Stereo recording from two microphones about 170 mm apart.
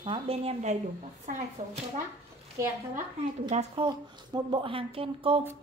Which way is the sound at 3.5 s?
40° right (ahead or behind).